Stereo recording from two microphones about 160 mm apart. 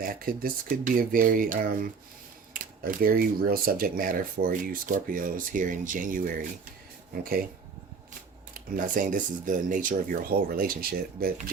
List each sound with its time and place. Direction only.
0.0 s speech: 60° right (ahead or behind)
8.5 s speech: 60° right (ahead or behind)